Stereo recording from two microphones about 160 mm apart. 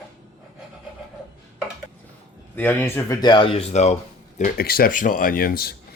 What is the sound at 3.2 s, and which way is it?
Speech, 30° left (ahead or behind).